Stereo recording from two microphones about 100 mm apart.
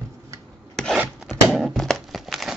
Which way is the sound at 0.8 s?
5° left (ahead or behind).